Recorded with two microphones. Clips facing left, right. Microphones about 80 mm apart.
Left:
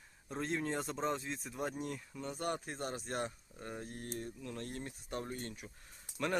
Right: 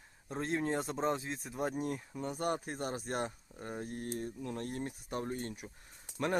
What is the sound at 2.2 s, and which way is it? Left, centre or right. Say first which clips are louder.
Speech: right 3 dB; centre.